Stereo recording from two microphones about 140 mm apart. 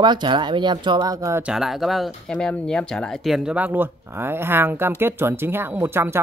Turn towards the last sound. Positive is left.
turn(degrees=-15)  # may be behind; listen again after turning